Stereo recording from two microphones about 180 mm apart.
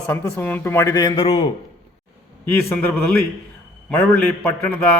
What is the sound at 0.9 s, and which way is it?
Speech, 25° left (ahead or behind).